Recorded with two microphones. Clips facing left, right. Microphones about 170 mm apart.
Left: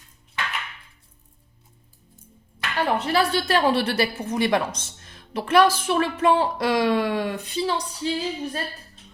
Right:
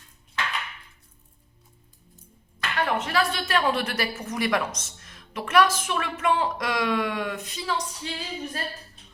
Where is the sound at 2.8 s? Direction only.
35° left (ahead or behind).